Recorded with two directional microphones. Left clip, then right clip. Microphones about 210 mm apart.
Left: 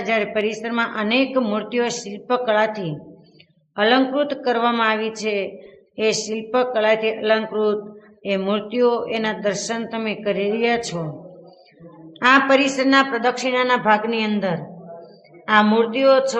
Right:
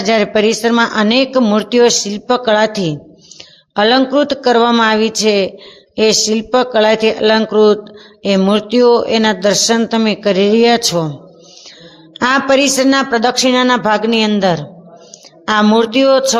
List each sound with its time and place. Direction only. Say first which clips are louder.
0.0 s speech: right 9 dB; 50° right (ahead or behind)
12.2 s speech: right 3 dB; 45° right (ahead or behind)